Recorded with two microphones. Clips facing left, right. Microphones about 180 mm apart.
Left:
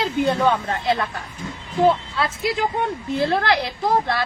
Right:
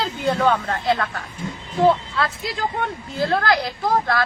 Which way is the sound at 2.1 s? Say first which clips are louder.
Left 2 dB; 25° left (ahead or behind).